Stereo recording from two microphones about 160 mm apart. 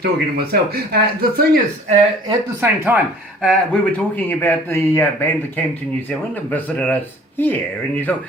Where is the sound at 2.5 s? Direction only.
15° right (ahead or behind).